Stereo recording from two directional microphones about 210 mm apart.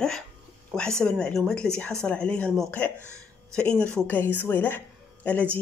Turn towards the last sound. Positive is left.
turn(degrees=10)  # may be behind; listen again after turning